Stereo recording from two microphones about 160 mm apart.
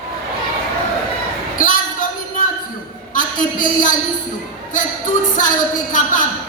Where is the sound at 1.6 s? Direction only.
60° left (ahead or behind).